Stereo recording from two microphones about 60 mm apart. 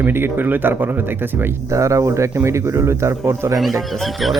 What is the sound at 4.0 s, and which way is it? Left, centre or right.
Speech, centre.